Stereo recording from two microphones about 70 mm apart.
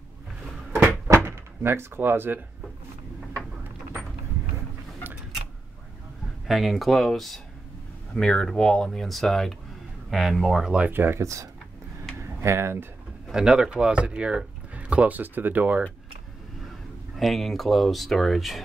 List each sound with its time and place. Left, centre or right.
1.0 s door: right
6.4 s speech: centre
10.9 s speech: right
12.2 s typing: right
13.3 s speech: centre; by 15.8 s right
17.2 s speech: centre